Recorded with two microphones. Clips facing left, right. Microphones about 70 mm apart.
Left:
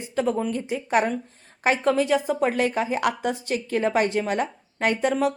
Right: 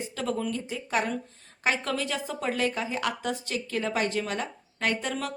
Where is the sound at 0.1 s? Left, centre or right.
Left.